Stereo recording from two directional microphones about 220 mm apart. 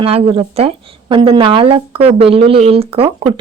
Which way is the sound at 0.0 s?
25° right (ahead or behind).